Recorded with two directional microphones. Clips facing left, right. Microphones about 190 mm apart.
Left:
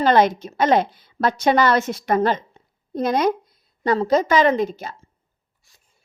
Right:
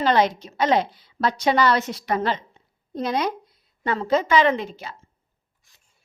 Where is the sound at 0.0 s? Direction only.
50° left (ahead or behind).